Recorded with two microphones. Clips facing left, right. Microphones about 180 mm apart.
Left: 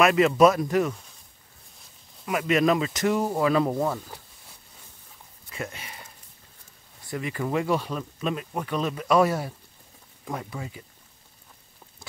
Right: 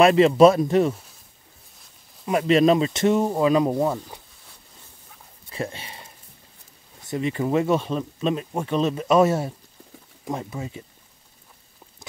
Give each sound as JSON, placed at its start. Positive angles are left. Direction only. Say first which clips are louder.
{"t": 0.0, "sound": "speech", "louder": "right 4 dB", "side_deg": -30}
{"t": 2.2, "sound": "speech", "louder": "right 5 dB", "side_deg": -30}
{"t": 5.5, "sound": "speech", "louder": "right 5 dB", "side_deg": -30}